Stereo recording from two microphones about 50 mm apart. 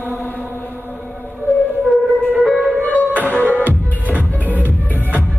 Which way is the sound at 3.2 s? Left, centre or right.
Left.